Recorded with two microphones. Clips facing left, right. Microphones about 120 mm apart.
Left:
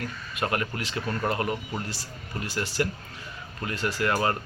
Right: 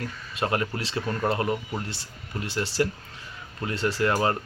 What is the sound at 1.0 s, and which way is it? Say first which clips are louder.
Speech: right 2 dB; 15° right (ahead or behind).